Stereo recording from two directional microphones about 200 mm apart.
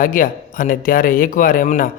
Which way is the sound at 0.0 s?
45° left (ahead or behind).